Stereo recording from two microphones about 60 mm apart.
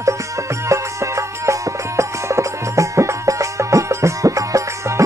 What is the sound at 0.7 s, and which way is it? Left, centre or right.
Music, right.